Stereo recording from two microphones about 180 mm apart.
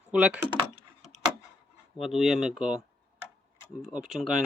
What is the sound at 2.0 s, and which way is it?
Speech, centre (ahead or behind).